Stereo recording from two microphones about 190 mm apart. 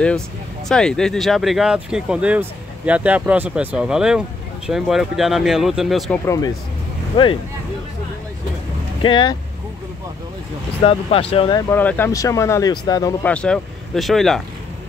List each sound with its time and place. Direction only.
0.7 s speech: 5° left (ahead or behind)
6.2 s speech: 15° left (ahead or behind)
9.0 s speech: 25° left (ahead or behind)
10.8 s speech: 30° left (ahead or behind)
11.7 s speech: 10° left (ahead or behind)
13.2 s speech: 5° left (ahead or behind)